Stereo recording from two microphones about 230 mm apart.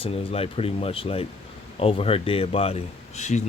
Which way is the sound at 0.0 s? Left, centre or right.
Left.